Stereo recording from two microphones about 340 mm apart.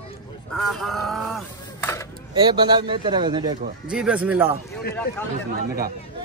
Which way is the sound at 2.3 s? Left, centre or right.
Centre.